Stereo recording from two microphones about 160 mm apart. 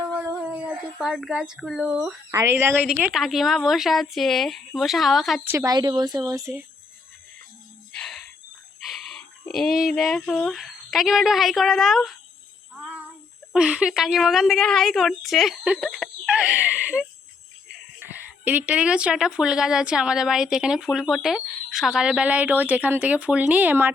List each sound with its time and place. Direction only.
0.0 s howl: 10° right (ahead or behind)
2.3 s speech: 15° right (ahead or behind)
3.0 s speech: centre (ahead or behind)
5.5 s speech: 20° right (ahead or behind)
7.9 s a sound: centre (ahead or behind)
8.8 s speech: centre (ahead or behind)
12.7 s child singing: 5° right (ahead or behind)
13.5 s speech: 5° right (ahead or behind)
15.9 s a sound: centre (ahead or behind)
18.1 s speech: 10° right (ahead or behind)